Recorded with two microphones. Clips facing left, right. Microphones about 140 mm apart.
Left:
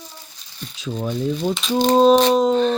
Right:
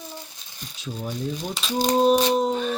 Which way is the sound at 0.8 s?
90° left.